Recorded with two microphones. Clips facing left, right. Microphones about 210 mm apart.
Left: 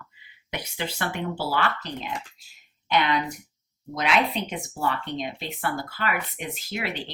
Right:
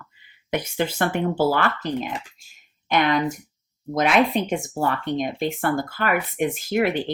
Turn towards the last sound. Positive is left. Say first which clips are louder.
# right 10 dB
turn(degrees=-50)  # may be behind; listen again after turning